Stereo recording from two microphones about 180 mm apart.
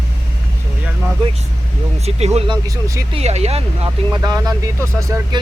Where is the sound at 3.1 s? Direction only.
35° right (ahead or behind).